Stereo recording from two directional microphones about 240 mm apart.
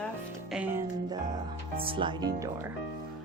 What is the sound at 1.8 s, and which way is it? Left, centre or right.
Speech, right.